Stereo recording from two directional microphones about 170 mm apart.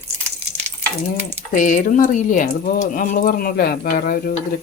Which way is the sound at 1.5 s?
50° left (ahead or behind).